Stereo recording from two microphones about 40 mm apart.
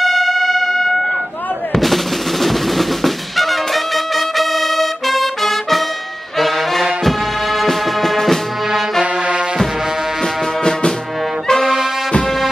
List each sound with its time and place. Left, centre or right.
0.0 s train: centre
2.4 s brass instrument: centre
6.3 s music: centre
10.2 s music: centre
11.6 s music: centre